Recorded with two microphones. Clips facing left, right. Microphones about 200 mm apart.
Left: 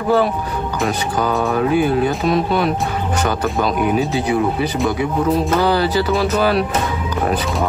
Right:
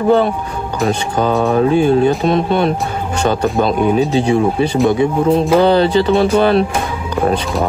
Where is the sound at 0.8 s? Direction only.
30° right (ahead or behind).